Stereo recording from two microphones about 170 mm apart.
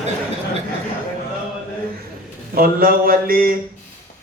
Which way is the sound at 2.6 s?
60° right (ahead or behind).